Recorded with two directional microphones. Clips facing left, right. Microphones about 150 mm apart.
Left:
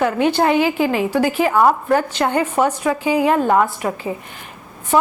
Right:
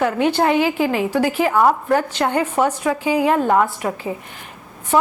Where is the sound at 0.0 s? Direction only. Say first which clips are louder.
Left 1 dB; 15° left (ahead or behind).